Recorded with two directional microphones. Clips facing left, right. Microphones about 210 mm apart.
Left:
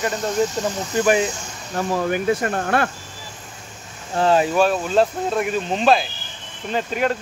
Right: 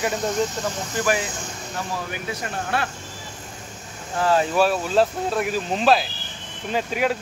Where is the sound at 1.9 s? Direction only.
50° left (ahead or behind).